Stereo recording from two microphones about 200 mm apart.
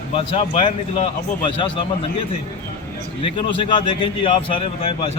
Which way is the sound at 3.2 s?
25° left (ahead or behind).